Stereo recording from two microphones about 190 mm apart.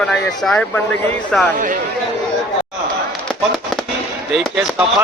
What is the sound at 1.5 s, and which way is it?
Speech, 45° right (ahead or behind).